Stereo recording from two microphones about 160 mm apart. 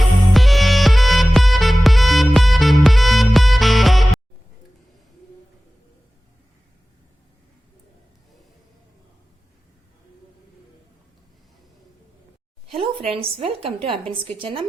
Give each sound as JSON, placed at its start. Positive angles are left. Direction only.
{"t": 0.3, "sound": "music", "side_deg": 0}
{"t": 12.7, "sound": "a woman's voice", "side_deg": -35}